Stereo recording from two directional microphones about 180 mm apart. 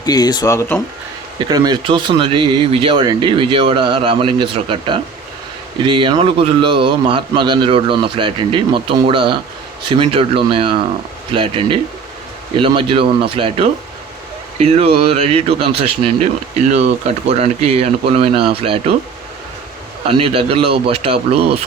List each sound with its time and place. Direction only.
0.0 s speech: 20° left (ahead or behind)
1.5 s speech: 20° right (ahead or behind)
20.1 s speech: 30° right (ahead or behind)